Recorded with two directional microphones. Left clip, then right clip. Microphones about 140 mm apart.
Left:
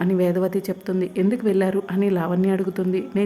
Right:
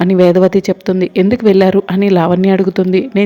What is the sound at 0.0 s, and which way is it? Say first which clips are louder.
Speech: right 12 dB; 40° right (ahead or behind).